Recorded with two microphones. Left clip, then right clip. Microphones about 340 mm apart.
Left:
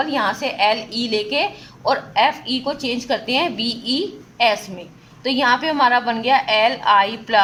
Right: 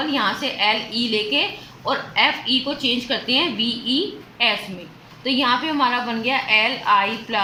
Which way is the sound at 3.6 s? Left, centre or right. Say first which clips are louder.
Right 1 dB; left.